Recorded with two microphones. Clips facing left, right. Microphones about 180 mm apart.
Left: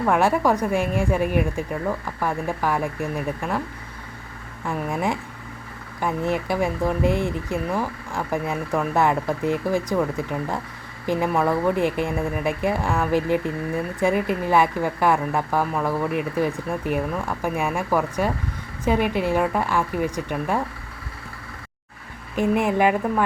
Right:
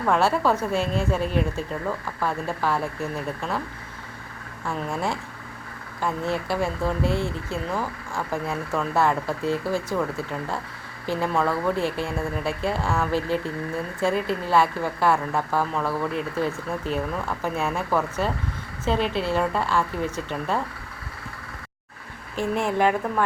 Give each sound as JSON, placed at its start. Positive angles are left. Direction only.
{"t": 0.0, "sound": "a woman's voice", "side_deg": 15}
{"t": 4.6, "sound": "a woman's voice", "side_deg": 15}
{"t": 22.4, "sound": "a woman's voice", "side_deg": 15}